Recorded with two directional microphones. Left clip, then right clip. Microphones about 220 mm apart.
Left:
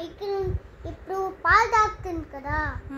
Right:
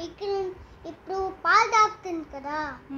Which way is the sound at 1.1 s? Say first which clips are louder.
Left 2 dB; 30° right (ahead or behind).